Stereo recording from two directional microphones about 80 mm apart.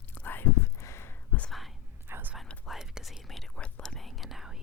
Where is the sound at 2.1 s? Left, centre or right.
Right.